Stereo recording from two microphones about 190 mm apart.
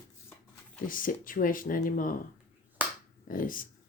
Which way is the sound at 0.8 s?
45° left (ahead or behind).